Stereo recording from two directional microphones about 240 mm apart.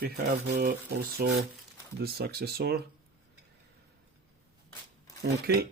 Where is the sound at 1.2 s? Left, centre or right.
Right.